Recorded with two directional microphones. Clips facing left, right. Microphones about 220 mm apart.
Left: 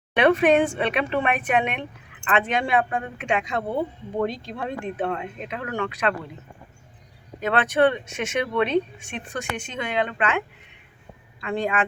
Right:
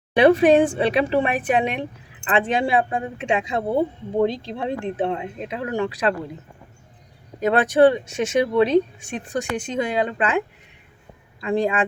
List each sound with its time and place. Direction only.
0.2 s a woman's voice: 35° right (ahead or behind)
7.4 s speech: 35° right (ahead or behind)